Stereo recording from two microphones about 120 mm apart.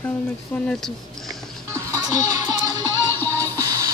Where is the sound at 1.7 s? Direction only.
30° right (ahead or behind).